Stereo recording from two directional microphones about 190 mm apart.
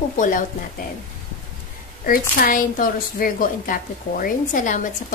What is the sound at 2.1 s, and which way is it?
A woman's voice, 50° left (ahead or behind).